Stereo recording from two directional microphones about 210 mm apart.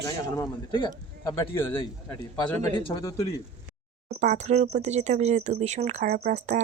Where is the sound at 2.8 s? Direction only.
25° left (ahead or behind).